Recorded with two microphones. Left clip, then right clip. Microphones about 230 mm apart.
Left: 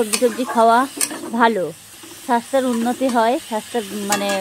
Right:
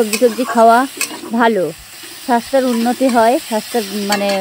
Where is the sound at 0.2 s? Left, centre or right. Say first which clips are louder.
Right 5 dB; right.